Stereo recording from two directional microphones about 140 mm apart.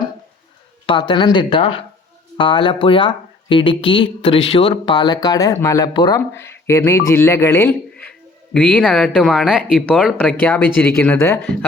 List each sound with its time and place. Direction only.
0.9 s speech: 35° left (ahead or behind)
6.1 s speech: 20° left (ahead or behind)
8.5 s speech: 10° left (ahead or behind)